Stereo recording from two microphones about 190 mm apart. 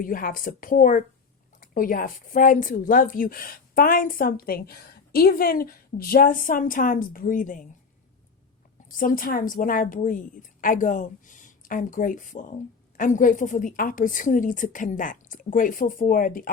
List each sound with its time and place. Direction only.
0.0 s speech: 45° left (ahead or behind)
8.9 s speech: 45° left (ahead or behind)